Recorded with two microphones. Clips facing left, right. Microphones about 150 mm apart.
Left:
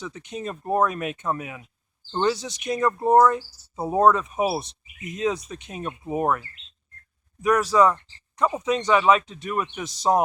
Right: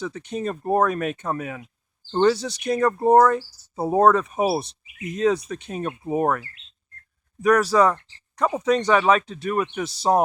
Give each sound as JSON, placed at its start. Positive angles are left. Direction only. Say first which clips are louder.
{"t": 0.0, "sound": "speech", "louder": "right 5 dB", "side_deg": -35}
{"t": 7.4, "sound": "speech", "louder": "right 1 dB", "side_deg": -35}